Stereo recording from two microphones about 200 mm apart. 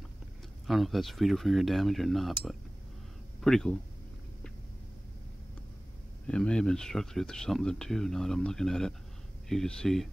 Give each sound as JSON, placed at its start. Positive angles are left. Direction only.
{"t": 0.7, "sound": "speech", "side_deg": 0}
{"t": 6.2, "sound": "speech", "side_deg": 5}